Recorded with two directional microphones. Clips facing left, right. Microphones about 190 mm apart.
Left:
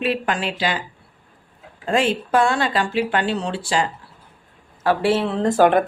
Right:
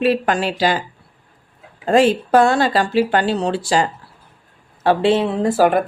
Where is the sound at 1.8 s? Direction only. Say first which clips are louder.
Right 6 dB; 40° right (ahead or behind).